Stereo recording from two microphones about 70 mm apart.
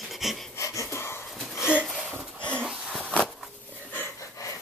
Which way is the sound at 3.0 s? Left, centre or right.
Centre.